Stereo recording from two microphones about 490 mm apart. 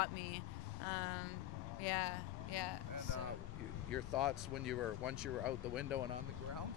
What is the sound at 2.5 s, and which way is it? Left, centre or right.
Speech, left.